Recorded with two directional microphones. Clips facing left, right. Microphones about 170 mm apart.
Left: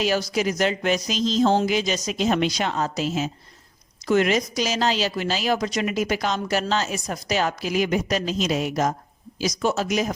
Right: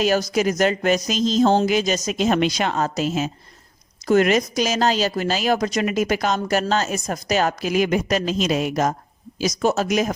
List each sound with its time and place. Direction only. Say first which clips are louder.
0.0 s a woman's voice: right 3 dB; 45° right (ahead or behind)
8.5 s a woman's voice: right 3 dB; 90° right
9.4 s a woman's voice: right 3 dB; 45° right (ahead or behind)